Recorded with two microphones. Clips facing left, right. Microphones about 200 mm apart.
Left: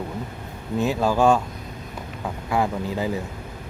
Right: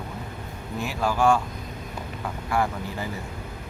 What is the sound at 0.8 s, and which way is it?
Speech, 20° left (ahead or behind).